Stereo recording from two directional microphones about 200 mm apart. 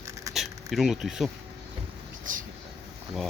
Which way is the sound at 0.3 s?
Centre (ahead or behind).